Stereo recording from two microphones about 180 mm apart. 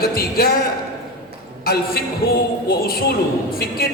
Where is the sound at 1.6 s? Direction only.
60° left (ahead or behind).